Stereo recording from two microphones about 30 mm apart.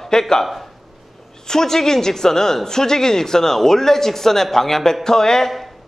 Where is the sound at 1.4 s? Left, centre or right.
Centre.